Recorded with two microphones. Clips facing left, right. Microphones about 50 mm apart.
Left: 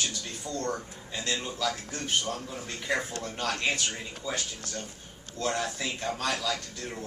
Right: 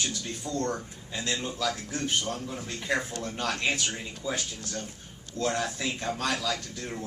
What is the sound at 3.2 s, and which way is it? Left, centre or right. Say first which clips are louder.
Speech: right 1 dB; centre.